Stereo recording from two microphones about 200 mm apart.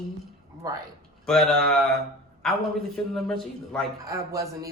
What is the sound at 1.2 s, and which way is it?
Speech, centre (ahead or behind).